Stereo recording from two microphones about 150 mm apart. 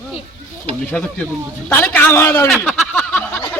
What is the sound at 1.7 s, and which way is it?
Speech, 10° left (ahead or behind).